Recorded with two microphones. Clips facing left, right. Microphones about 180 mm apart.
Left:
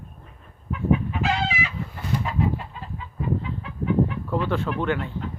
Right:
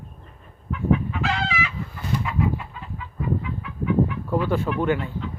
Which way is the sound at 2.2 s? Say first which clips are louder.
Even; 35° left (ahead or behind).